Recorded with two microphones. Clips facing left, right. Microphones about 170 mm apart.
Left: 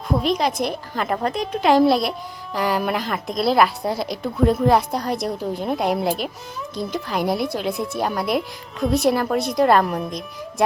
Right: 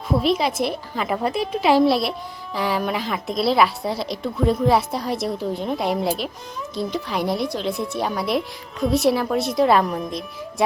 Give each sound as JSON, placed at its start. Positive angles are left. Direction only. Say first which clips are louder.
{"t": 0.1, "sound": "a woman's voice", "louder": "right 1 dB", "side_deg": -5}